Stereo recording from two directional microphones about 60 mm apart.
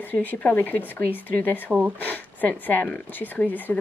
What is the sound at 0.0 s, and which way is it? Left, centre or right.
Speech, left.